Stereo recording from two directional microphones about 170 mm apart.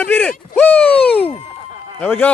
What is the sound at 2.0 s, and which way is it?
Speech, 10° left (ahead or behind).